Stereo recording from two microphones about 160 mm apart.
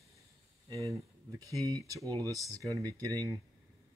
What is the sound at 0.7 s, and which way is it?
Speech, 20° right (ahead or behind).